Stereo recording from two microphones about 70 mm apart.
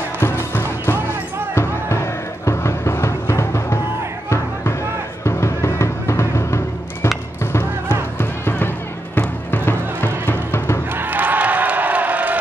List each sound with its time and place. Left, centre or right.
0.2 s music: left
5.2 s music: left
8.2 s music: left
11.0 s music: right